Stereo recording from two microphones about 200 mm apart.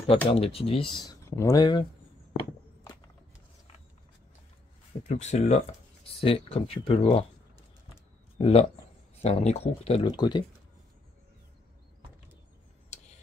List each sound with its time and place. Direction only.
0.3 s speech: 30° left (ahead or behind)
5.0 s speech: 35° left (ahead or behind)
8.4 s speech: 30° left (ahead or behind)